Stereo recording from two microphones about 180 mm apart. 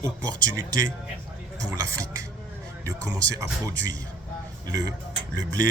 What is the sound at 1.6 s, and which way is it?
Speech, 20° right (ahead or behind).